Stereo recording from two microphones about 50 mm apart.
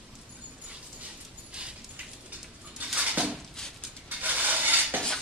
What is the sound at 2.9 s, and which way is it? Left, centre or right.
Dishes, right.